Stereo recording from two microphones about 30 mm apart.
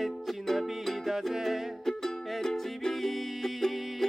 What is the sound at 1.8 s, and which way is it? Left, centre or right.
Music, centre.